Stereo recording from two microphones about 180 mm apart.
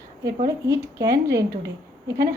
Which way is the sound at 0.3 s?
20° right (ahead or behind).